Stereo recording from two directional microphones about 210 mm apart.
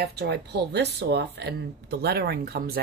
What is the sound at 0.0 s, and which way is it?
Speech, 50° right (ahead or behind).